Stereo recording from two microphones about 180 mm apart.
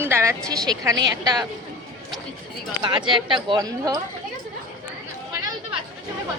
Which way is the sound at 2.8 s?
25° right (ahead or behind).